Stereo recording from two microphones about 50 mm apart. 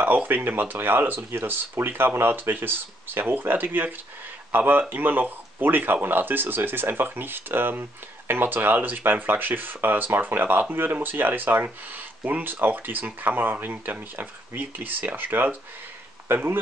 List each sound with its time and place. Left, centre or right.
0.0 s speech: right